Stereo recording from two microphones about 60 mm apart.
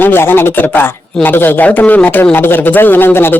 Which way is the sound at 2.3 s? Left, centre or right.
Left.